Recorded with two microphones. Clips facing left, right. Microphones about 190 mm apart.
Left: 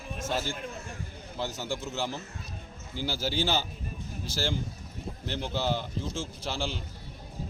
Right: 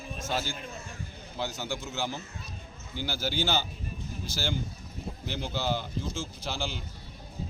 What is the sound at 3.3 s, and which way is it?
Speech, centre (ahead or behind).